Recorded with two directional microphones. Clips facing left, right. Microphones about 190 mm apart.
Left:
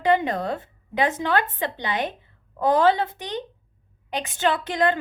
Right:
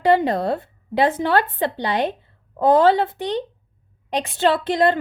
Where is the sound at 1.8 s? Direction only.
35° right (ahead or behind).